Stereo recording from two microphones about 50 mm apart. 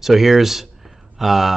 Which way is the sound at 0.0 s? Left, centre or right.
Centre.